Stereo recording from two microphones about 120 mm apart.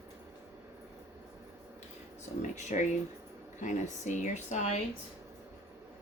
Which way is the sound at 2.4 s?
80° left.